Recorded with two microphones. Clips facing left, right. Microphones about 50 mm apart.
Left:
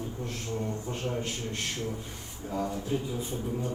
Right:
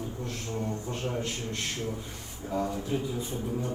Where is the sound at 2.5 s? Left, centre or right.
Right.